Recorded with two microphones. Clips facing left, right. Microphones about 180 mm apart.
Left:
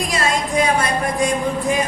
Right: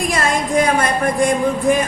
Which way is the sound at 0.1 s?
55° right (ahead or behind).